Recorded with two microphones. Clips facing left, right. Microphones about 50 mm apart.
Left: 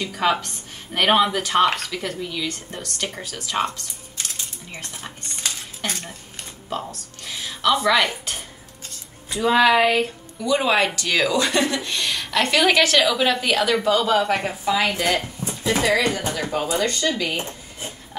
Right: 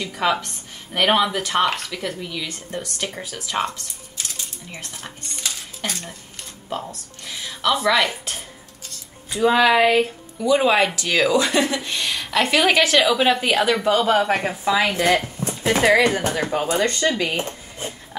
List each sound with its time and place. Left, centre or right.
0.0 s speech: centre
5.9 s speech: centre
6.9 s a sound: centre
7.8 s speech: centre
9.3 s speech: centre
13.8 s speech: right